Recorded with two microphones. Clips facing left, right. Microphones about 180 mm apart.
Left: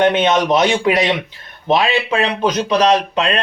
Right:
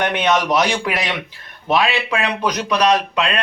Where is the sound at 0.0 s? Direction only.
25° left (ahead or behind).